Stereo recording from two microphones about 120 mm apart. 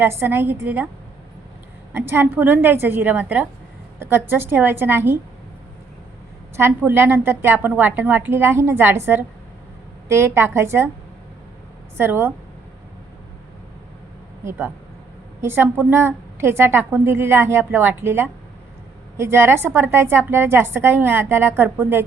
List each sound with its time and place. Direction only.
0.0 s a woman's voice: 20° right (ahead or behind)
1.9 s a woman's voice: 15° right (ahead or behind)
6.6 s a woman's voice: 20° right (ahead or behind)
11.9 s a woman's voice: 20° right (ahead or behind)
15.4 s a woman's voice: 20° right (ahead or behind)